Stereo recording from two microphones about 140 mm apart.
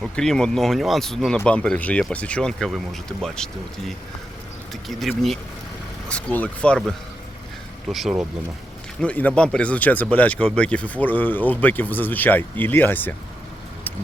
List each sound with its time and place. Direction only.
0.0 s speech: 5° left (ahead or behind)
9.0 s speech: 10° left (ahead or behind)